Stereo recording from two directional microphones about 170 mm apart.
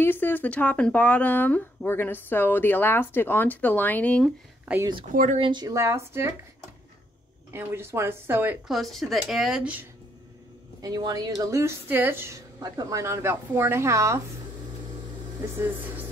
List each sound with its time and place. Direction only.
0.0 s speech: 10° left (ahead or behind)
4.7 s speech: 5° right (ahead or behind)
5.1 s speech: 50° right (ahead or behind)
5.4 s speech: 25° right (ahead or behind)
7.5 s speech: 15° right (ahead or behind)
8.6 s speech: centre (ahead or behind)
10.8 s speech: 25° right (ahead or behind)
15.5 s music: 10° right (ahead or behind)